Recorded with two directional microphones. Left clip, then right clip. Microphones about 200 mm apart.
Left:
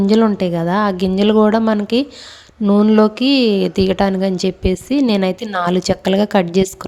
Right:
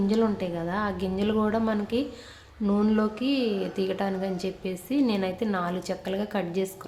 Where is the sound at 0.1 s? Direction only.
40° left (ahead or behind).